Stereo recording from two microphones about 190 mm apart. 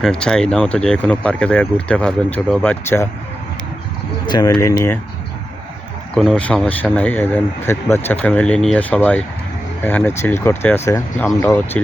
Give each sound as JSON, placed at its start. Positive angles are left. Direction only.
{"t": 0.0, "sound": "speech", "side_deg": 5}
{"t": 4.3, "sound": "speech", "side_deg": 20}
{"t": 6.1, "sound": "speech", "side_deg": 5}